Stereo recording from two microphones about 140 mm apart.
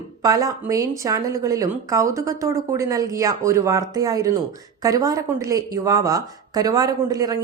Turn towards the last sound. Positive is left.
turn(degrees=-25)  # may be behind; listen again after turning